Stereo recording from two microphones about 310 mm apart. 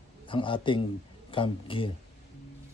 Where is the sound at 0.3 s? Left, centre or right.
Centre.